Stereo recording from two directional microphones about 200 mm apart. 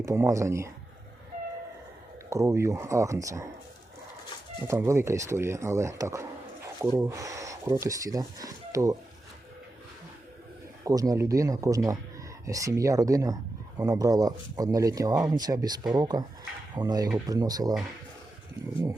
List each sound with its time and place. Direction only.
0.0 s speech: 15° right (ahead or behind)
2.3 s speech: 15° right (ahead or behind)
4.7 s speech: 15° right (ahead or behind)
10.8 s speech: 15° right (ahead or behind)